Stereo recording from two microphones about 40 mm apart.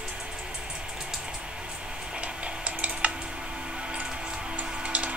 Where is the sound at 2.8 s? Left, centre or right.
Right.